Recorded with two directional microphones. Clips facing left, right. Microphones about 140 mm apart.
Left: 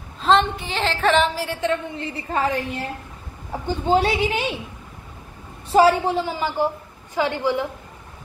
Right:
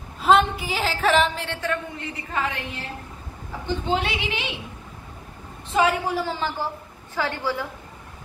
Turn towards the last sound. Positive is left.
turn(degrees=20)  # may be behind; listen again after turning